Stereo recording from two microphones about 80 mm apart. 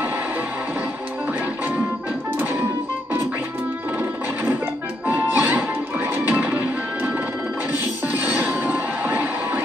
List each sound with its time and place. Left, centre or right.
5.0 s music: right
8.1 s music: right